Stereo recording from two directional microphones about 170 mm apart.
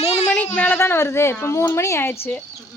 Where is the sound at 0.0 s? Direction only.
40° left (ahead or behind).